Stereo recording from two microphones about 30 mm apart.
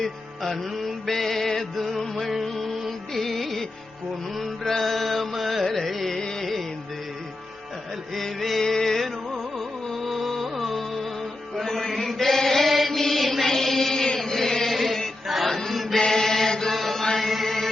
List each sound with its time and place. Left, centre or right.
0.0 s music: centre
4.7 s music: centre
5.6 s carnatic music: centre
6.4 s music: centre
8.1 s music: centre
8.6 s music: centre
9.9 s music: centre
11.9 s chant: centre
13.0 s mantra: centre
14.2 s chant: centre
15.4 s mantra: centre
16.0 s chant: centre
16.7 s mantra: centre
17.2 s music: centre